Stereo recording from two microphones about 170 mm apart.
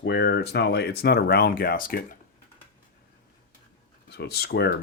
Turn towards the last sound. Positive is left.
turn(degrees=70)  # may be behind; listen again after turning